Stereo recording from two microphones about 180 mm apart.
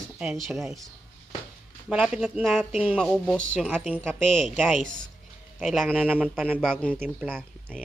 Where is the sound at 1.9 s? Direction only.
5° right (ahead or behind).